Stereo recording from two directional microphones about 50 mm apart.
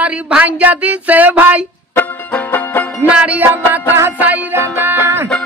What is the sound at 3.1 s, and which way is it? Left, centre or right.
Music, right.